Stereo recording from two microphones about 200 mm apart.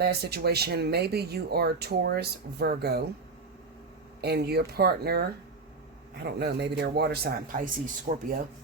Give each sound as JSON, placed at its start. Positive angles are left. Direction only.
{"t": 0.0, "sound": "speech", "side_deg": -55}
{"t": 4.2, "sound": "speech", "side_deg": -55}
{"t": 6.2, "sound": "speech", "side_deg": -55}